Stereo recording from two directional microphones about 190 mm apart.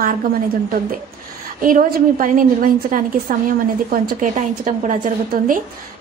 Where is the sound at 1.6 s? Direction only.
45° right (ahead or behind).